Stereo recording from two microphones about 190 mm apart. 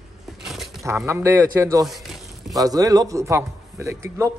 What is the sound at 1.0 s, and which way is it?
Speech, 15° right (ahead or behind).